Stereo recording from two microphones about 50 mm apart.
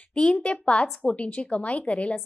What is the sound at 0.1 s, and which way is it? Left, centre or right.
A woman's voice, left.